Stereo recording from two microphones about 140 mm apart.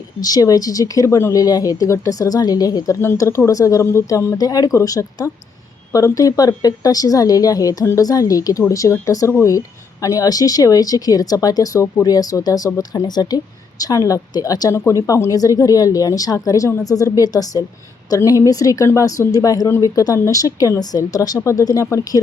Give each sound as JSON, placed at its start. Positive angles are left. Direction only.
{"t": 0.2, "sound": "speech", "side_deg": 25}